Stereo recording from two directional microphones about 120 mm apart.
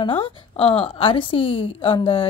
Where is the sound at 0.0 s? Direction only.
50° left (ahead or behind).